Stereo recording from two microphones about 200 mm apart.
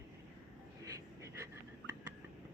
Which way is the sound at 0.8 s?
15° right (ahead or behind).